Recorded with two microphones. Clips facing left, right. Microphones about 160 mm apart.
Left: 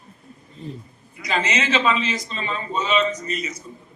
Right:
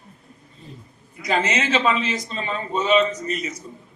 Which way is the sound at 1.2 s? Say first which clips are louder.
Right 2 dB; 50° right (ahead or behind).